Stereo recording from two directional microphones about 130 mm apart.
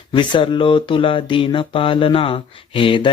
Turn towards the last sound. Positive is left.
turn(degrees=40)  # may be behind; listen again after turning